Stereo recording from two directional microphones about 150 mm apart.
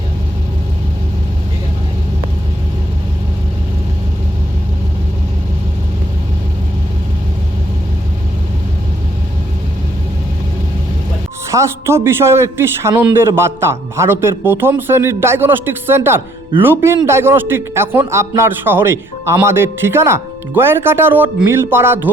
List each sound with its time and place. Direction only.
11.5 s a man's voice: 20° right (ahead or behind)